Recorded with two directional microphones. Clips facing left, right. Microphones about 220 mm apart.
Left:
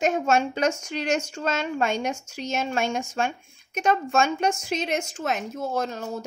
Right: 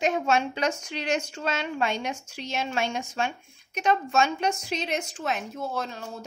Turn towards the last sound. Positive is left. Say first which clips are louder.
# left 4 dB
turn(degrees=45)  # may be behind; listen again after turning